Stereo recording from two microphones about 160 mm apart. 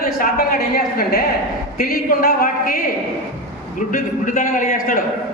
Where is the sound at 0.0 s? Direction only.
70° left (ahead or behind).